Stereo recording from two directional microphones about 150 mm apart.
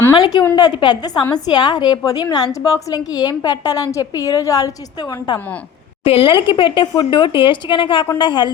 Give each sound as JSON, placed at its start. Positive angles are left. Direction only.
{"t": 0.2, "sound": "a woman's voice", "side_deg": 30}